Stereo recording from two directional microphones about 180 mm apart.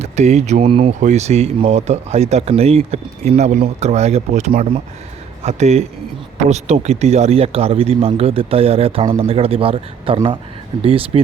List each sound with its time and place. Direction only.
0.0 s speech: 40° right (ahead or behind)